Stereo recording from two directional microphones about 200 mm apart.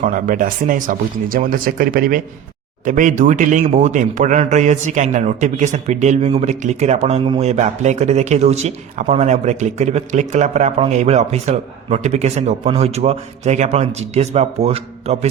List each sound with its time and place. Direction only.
0.0 s speech: 40° right (ahead or behind)